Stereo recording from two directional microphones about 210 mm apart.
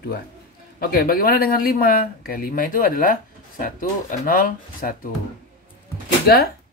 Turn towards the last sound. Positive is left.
turn(degrees=50)  # may be behind; listen again after turning